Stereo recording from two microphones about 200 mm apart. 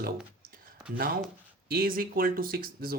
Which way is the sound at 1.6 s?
45° right (ahead or behind).